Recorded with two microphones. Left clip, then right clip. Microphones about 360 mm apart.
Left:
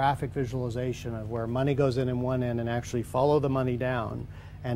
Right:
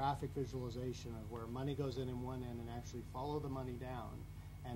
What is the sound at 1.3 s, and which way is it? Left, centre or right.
Speech, left.